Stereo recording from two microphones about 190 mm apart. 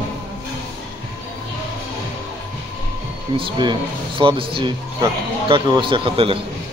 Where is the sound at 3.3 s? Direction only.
25° right (ahead or behind).